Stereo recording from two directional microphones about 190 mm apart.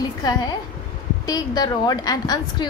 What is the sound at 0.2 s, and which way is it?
A woman's voice, 20° left (ahead or behind).